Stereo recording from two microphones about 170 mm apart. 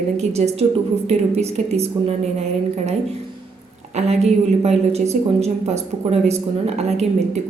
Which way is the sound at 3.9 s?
40° right (ahead or behind).